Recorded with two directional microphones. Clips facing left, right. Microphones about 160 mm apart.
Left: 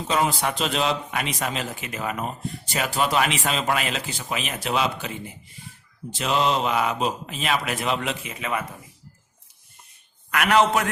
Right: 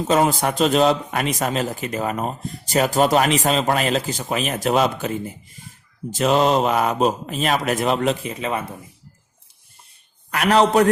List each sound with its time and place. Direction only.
0.1 s a man's voice: 45° right (ahead or behind)
10.3 s a man's voice: 35° right (ahead or behind)